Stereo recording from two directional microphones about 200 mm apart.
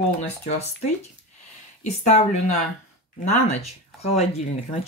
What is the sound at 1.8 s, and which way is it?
Speech, 35° left (ahead or behind).